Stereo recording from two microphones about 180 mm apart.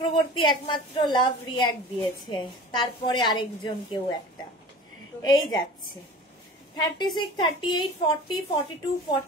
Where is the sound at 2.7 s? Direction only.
25° left (ahead or behind).